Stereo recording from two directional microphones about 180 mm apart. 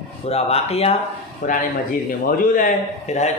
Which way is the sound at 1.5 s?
45° left (ahead or behind).